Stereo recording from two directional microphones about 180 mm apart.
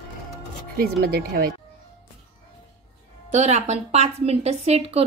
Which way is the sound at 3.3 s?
40° right (ahead or behind).